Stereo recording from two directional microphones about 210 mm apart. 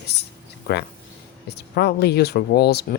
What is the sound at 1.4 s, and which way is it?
Speech, 50° left (ahead or behind).